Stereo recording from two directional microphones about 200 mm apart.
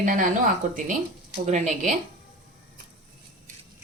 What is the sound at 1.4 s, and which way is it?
Speech, 40° right (ahead or behind).